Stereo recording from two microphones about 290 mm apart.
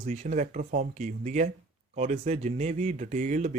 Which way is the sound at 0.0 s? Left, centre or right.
Right.